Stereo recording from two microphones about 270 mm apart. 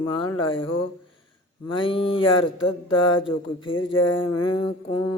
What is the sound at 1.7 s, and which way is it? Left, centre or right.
Mantra, centre.